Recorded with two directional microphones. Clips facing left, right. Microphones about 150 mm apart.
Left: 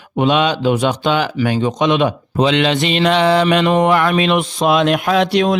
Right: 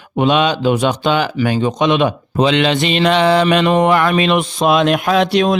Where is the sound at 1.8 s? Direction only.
25° right (ahead or behind).